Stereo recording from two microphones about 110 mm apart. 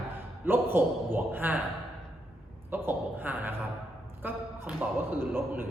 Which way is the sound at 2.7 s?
20° right (ahead or behind).